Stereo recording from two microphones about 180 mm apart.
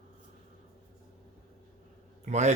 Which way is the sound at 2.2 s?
40° right (ahead or behind).